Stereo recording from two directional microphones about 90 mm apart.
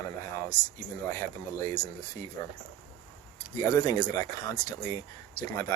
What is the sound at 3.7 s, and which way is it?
Speech, 45° left (ahead or behind).